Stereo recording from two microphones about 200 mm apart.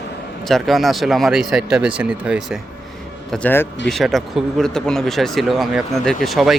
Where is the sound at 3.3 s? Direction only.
10° left (ahead or behind).